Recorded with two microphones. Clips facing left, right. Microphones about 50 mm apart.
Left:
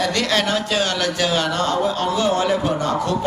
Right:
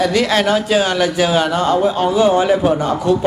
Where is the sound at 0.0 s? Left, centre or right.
Centre.